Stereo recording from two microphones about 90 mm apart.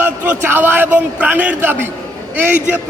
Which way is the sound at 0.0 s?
20° right (ahead or behind).